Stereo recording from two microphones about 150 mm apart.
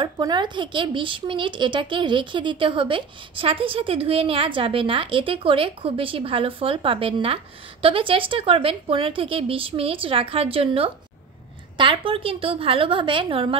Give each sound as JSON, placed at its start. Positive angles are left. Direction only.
{"t": 0.0, "sound": "speech", "side_deg": -30}